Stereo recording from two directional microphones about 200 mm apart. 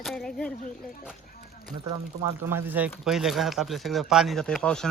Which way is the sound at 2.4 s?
10° right (ahead or behind).